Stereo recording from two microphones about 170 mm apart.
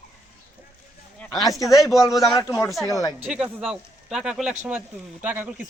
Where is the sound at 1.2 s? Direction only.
Centre (ahead or behind).